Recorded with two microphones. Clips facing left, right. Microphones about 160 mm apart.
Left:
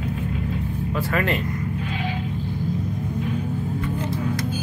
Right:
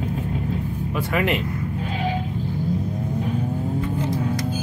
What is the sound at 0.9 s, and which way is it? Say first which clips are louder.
Speech: right 1 dB; 15° right (ahead or behind).